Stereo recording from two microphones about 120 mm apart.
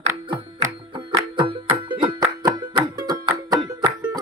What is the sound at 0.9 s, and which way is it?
Music, 40° right (ahead or behind).